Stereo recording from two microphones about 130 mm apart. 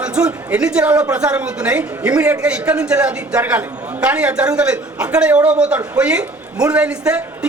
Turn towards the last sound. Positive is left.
turn(degrees=-10)  # may be behind; listen again after turning